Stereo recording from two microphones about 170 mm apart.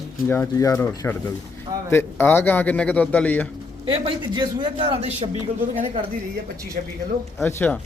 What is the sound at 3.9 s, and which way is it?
Speech, 30° right (ahead or behind).